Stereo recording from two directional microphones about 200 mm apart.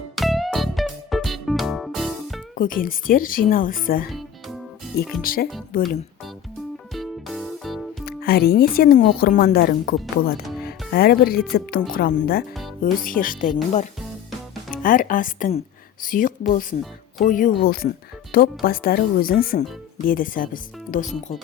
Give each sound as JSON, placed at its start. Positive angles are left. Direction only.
{"t": 0.2, "sound": "music", "side_deg": 0}
{"t": 2.6, "sound": "speech", "side_deg": 45}
{"t": 4.1, "sound": "music", "side_deg": 0}
{"t": 5.2, "sound": "speech", "side_deg": 45}
{"t": 6.9, "sound": "music", "side_deg": 0}
{"t": 8.0, "sound": "speech", "side_deg": 50}
{"t": 14.7, "sound": "speech", "side_deg": 45}